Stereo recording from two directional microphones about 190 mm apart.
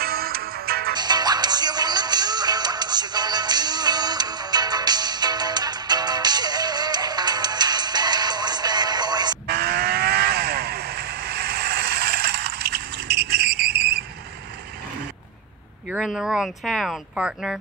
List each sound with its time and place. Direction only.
0.0 s music: 55° right (ahead or behind)
0.9 s music: 20° right (ahead or behind)
9.5 s vehicle: 55° right (ahead or behind)
15.9 s speech: centre (ahead or behind)